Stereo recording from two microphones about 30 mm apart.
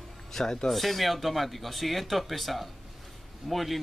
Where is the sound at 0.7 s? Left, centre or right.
Centre.